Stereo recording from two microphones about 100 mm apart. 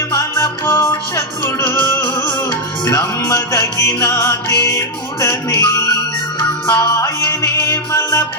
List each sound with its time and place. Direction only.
0.1 s music: 35° left (ahead or behind)